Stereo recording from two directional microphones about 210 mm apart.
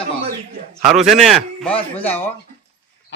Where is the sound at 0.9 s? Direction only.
Centre (ahead or behind).